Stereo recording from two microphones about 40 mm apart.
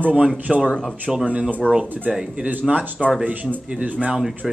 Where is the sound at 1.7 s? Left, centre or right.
Centre.